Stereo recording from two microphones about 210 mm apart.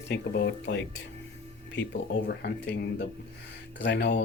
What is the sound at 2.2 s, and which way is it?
Speech, 50° left (ahead or behind).